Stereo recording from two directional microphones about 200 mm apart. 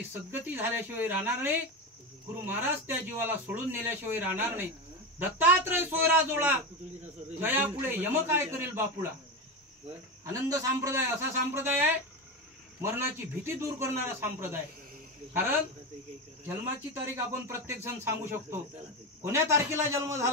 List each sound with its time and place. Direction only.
0.1 s a man's voice: 10° right (ahead or behind)
10.2 s a man's voice: 15° right (ahead or behind)
12.8 s a man's voice: 10° right (ahead or behind)
16.4 s a man's voice: 10° right (ahead or behind)